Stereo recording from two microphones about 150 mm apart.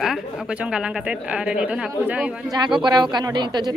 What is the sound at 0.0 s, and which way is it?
A woman's voice, 5° right (ahead or behind).